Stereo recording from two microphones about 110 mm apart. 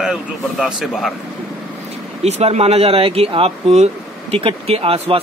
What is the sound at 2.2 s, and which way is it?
Speech, 75° right (ahead or behind).